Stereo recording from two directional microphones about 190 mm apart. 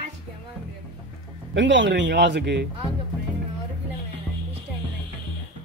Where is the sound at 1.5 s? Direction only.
70° right (ahead or behind).